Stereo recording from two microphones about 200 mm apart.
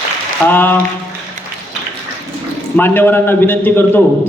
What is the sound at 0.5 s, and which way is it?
Speech, 10° left (ahead or behind).